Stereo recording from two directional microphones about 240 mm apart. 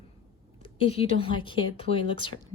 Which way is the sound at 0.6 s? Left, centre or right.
Left.